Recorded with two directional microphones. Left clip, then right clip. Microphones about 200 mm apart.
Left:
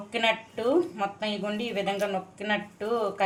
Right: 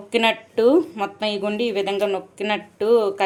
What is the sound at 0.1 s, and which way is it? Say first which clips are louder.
Speech: right 7 dB; 50° right (ahead or behind).